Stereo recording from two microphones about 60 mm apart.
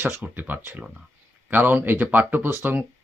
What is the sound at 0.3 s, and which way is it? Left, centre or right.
Speech, right.